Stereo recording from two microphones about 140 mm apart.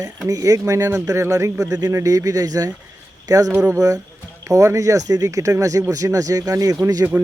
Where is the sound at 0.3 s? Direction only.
25° right (ahead or behind).